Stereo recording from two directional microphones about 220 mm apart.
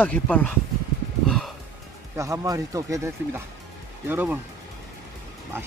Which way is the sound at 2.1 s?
15° right (ahead or behind).